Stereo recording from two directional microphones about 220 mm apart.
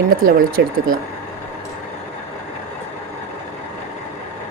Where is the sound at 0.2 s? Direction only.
40° right (ahead or behind).